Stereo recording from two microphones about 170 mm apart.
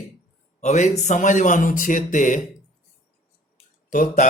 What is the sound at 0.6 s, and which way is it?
Speech, 45° left (ahead or behind).